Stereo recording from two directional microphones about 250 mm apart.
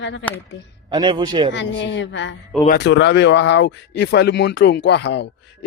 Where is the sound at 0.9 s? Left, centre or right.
Centre.